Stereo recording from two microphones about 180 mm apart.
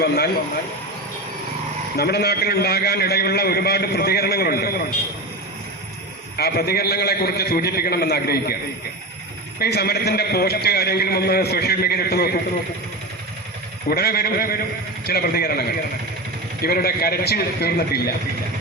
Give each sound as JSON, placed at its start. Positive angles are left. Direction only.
{"t": 2.0, "sound": "a man's voice", "side_deg": 60}
{"t": 6.3, "sound": "a man's voice", "side_deg": 60}
{"t": 9.6, "sound": "a man's voice", "side_deg": 60}
{"t": 13.9, "sound": "a man's voice", "side_deg": 60}
{"t": 16.6, "sound": "a man's voice", "side_deg": 55}